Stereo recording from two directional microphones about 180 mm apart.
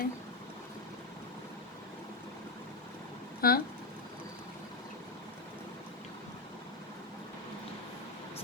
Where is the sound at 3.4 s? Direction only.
55° left (ahead or behind).